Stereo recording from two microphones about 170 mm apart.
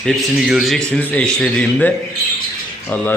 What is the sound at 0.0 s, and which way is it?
Speech, centre (ahead or behind).